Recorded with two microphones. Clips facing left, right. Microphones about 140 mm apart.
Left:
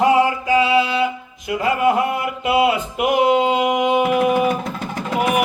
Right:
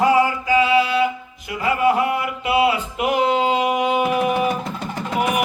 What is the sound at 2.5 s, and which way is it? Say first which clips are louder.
Mantra: left 1 dB; 25° left (ahead or behind).